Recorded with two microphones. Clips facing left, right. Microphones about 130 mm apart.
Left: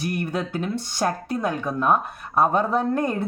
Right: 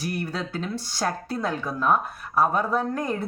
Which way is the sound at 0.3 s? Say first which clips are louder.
Left 4 dB; 15° left (ahead or behind).